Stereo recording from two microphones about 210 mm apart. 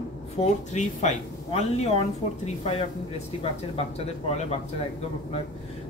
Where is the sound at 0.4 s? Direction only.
35° left (ahead or behind).